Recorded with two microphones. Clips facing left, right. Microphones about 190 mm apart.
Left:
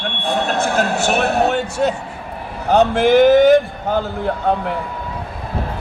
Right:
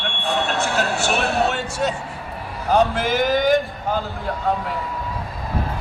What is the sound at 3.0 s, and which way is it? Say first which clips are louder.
Speech: left 9 dB; 65° left (ahead or behind).